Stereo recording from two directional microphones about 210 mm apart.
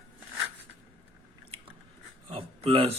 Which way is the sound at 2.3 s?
25° right (ahead or behind).